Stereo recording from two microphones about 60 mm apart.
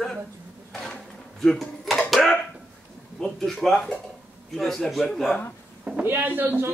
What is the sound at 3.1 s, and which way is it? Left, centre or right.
Speech, centre.